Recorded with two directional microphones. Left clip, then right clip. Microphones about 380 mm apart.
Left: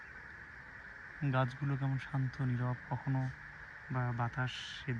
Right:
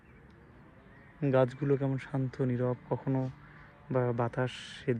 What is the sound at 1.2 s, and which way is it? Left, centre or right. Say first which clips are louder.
Speech: right 10 dB; centre.